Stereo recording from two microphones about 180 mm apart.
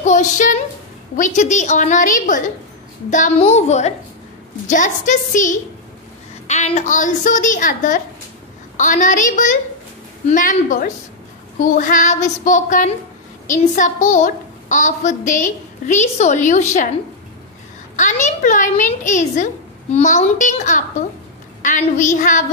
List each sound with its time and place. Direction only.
0.0 s a woman's voice: 45° left (ahead or behind)
17.9 s a woman's voice: 40° left (ahead or behind)